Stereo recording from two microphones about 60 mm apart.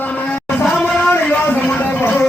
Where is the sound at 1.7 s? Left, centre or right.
Left.